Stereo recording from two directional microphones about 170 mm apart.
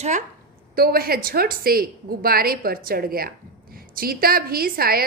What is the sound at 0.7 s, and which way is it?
A woman's voice, 60° right (ahead or behind).